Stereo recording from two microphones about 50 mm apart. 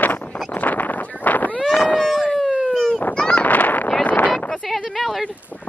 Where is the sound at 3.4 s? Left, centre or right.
Left.